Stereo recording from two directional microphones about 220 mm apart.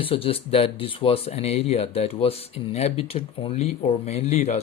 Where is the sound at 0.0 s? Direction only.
25° left (ahead or behind).